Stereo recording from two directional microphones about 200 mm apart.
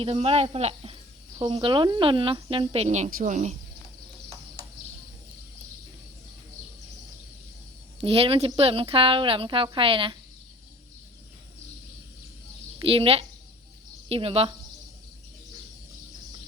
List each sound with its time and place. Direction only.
0.0 s speech: 30° right (ahead or behind)
8.0 s speech: 30° right (ahead or behind)
12.8 s speech: 25° right (ahead or behind)